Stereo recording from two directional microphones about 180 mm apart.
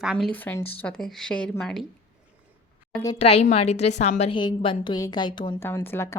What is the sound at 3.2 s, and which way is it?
A woman's voice, 35° left (ahead or behind).